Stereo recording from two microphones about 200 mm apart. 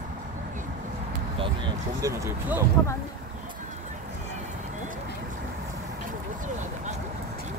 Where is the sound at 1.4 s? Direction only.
20° right (ahead or behind).